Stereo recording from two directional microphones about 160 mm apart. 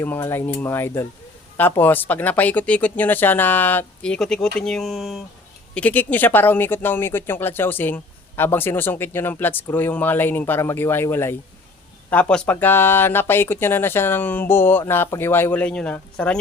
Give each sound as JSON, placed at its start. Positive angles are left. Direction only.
{"t": 0.0, "sound": "speech", "side_deg": 15}
{"t": 5.7, "sound": "speech", "side_deg": 10}